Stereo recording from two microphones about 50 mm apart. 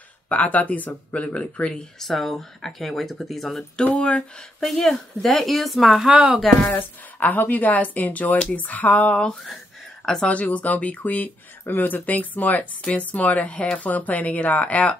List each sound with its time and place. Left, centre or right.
0.3 s speech: left
2.0 s speech: centre
3.7 s speech: left
4.6 s speech: centre
5.9 s speech: centre
6.6 s speech: left